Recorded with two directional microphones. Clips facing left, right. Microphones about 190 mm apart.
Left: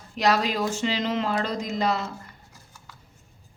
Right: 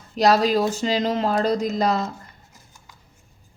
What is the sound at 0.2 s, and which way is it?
A man's voice, 40° right (ahead or behind).